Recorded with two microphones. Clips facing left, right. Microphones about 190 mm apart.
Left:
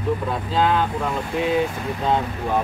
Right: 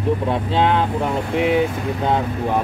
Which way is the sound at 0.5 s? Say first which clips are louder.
Right 1 dB; 25° right (ahead or behind).